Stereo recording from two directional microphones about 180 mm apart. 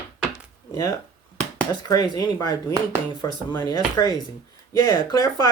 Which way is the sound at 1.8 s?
20° left (ahead or behind).